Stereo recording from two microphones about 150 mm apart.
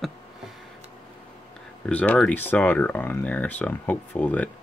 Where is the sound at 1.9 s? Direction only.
10° left (ahead or behind).